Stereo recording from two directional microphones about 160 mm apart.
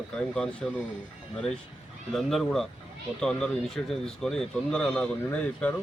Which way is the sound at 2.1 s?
Centre (ahead or behind).